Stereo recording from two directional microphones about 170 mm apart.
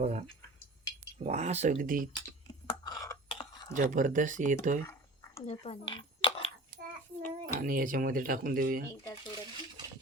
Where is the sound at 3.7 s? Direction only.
50° right (ahead or behind).